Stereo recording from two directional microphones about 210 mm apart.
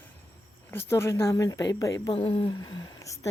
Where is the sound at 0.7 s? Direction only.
10° left (ahead or behind).